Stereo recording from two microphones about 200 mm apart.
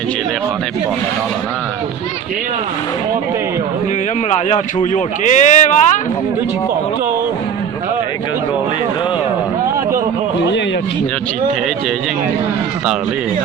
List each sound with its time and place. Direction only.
4.3 s speech: 35° left (ahead or behind)